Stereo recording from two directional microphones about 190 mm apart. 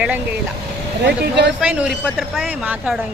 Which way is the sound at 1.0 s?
65° right (ahead or behind).